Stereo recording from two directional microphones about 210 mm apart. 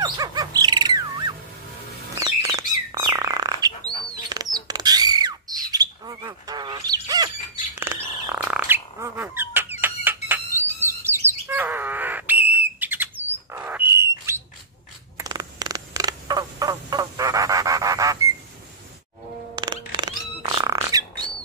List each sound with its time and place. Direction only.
0.0 s bird: 20° right (ahead or behind)
4.1 s squawk: 20° right (ahead or behind)
7.8 s bird: 10° right (ahead or behind)
15.1 s a sound: 20° right (ahead or behind)
19.5 s music: 20° right (ahead or behind)